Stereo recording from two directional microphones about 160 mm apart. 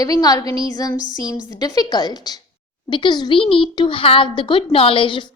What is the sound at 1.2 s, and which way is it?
A child's voice, 25° left (ahead or behind).